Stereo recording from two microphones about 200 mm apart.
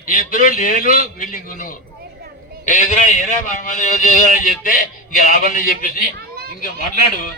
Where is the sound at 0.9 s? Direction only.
40° left (ahead or behind).